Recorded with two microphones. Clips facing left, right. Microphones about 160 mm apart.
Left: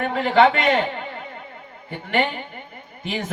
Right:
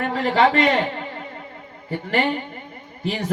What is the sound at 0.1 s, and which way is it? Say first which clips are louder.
Speech: left 2 dB; 35° right (ahead or behind).